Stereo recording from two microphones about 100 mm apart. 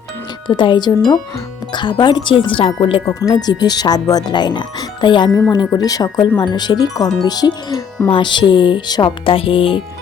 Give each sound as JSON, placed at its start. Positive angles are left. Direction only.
{"t": 0.4, "sound": "speech", "side_deg": 50}
{"t": 3.2, "sound": "speech", "side_deg": 40}